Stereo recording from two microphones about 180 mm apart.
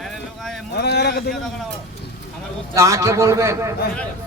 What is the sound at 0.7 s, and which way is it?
Speech, 65° left (ahead or behind).